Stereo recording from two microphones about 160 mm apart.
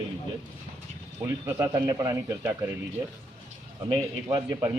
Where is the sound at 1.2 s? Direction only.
20° right (ahead or behind).